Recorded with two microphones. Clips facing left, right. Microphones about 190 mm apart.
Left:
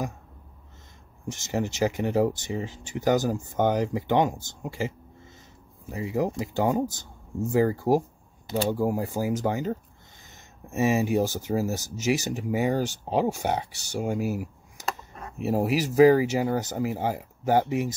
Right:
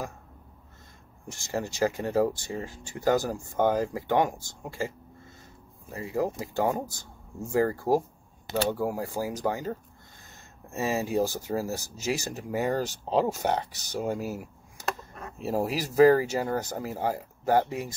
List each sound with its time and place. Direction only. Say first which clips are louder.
1.3 s speech: left 3 dB; 20° left (ahead or behind)